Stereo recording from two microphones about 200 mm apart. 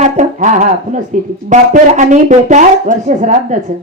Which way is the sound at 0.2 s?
40° right (ahead or behind).